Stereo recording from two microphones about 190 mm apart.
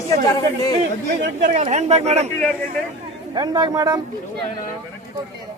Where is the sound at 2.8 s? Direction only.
5° left (ahead or behind).